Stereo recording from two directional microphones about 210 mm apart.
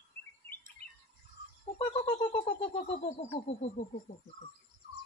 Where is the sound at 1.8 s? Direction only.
25° left (ahead or behind).